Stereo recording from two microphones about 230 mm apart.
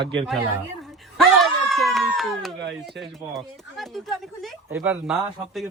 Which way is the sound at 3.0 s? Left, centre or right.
Centre.